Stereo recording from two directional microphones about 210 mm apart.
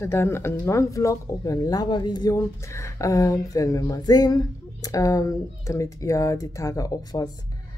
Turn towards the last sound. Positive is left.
turn(degrees=20)  # may be behind; listen again after turning